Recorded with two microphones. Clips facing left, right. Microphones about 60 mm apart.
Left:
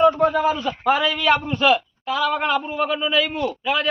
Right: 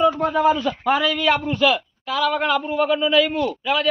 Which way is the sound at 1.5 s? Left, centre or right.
Left.